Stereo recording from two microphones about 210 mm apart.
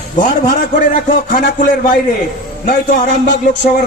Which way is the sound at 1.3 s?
40° left (ahead or behind).